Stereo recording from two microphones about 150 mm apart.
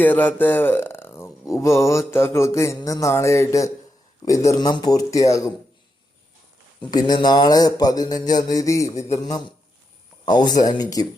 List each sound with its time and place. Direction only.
0.0 s speech: 10° left (ahead or behind)
4.3 s mantra: 25° left (ahead or behind)
6.9 s mantra: 30° left (ahead or behind)